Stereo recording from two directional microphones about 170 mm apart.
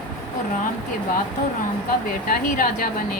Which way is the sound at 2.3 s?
55° left (ahead or behind).